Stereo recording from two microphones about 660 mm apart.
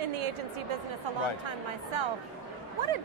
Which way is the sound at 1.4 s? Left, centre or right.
Right.